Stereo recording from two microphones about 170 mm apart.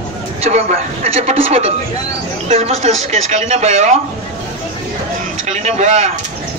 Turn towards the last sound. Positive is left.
turn(degrees=-45)  # may be behind; listen again after turning